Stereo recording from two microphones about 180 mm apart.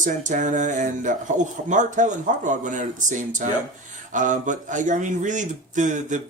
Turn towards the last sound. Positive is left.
turn(degrees=-45)  # may be behind; listen again after turning